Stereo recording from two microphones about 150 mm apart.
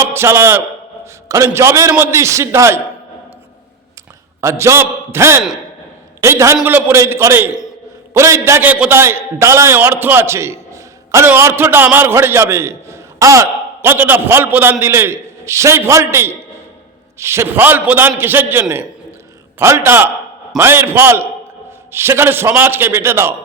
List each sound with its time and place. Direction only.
0.0 s a man's voice: 15° right (ahead or behind)
4.4 s a man's voice: 20° right (ahead or behind)